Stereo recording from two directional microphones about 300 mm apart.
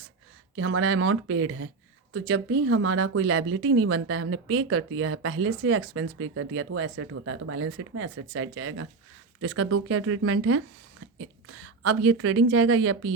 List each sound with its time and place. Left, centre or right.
0.5 s speech: right